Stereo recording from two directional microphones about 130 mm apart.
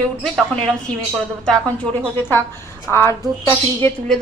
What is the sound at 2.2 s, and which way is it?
Speech, 15° left (ahead or behind).